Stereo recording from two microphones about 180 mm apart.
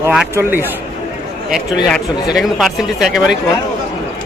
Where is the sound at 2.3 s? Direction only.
Centre (ahead or behind).